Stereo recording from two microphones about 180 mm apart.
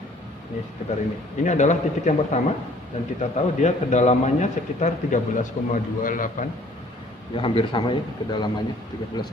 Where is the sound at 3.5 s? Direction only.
40° left (ahead or behind).